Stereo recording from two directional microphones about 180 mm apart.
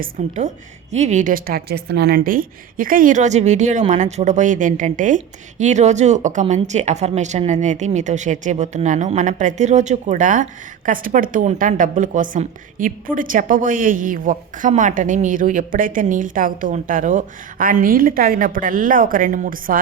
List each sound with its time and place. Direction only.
0.0 s a woman's voice: 40° right (ahead or behind)